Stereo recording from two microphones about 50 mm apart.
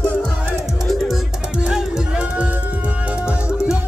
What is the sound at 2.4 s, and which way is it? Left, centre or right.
Music, right.